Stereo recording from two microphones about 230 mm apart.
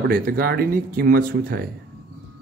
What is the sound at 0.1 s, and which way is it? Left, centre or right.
Speech, right.